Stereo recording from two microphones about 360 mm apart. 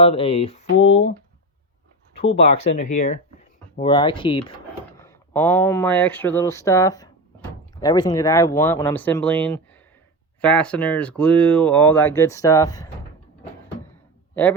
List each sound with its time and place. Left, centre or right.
0.0 s speech: centre
2.3 s speech: centre